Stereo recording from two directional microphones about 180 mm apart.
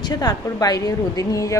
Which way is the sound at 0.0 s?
20° left (ahead or behind).